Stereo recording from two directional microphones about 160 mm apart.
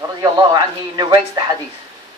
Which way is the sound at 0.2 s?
25° right (ahead or behind).